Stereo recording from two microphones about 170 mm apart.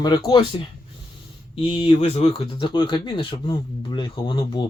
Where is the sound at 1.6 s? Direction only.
30° left (ahead or behind).